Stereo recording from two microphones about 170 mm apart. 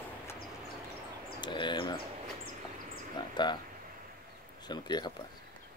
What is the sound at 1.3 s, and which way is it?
Bird, 25° left (ahead or behind).